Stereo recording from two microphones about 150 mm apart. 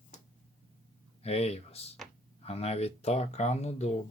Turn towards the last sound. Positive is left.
turn(degrees=45)  # may be behind; listen again after turning